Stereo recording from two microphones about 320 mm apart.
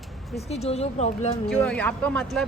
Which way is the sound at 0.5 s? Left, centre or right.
Centre.